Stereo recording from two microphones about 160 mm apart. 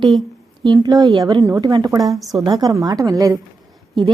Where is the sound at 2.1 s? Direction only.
Centre (ahead or behind).